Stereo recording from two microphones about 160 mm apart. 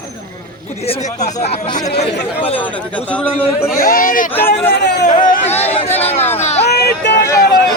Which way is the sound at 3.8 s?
60° left (ahead or behind).